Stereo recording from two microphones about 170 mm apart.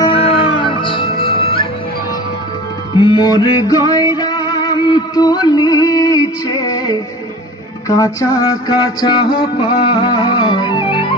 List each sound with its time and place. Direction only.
0.0 s music: 35° left (ahead or behind)
3.0 s music: 25° left (ahead or behind)